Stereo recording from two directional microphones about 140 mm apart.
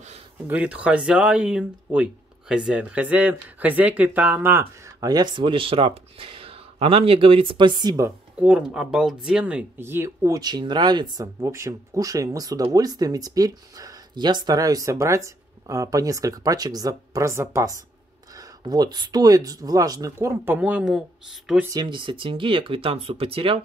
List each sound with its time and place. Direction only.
0.5 s speech: 10° right (ahead or behind); by 8.1 s 30° right (ahead or behind)
8.4 s speech: 10° right (ahead or behind)
21.6 s speech: 30° right (ahead or behind)